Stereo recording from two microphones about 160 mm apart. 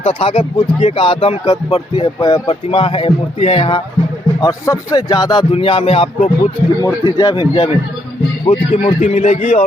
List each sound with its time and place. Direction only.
0.0 s speech: 35° left (ahead or behind)
4.4 s speech: 20° left (ahead or behind); by 6.1 s 40° left (ahead or behind)
6.1 s speech: 55° left (ahead or behind)
6.8 s speech: 25° left (ahead or behind)
9.0 s speech: 50° left (ahead or behind)